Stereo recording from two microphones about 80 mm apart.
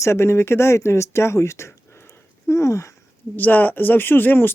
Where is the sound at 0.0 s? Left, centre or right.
Left.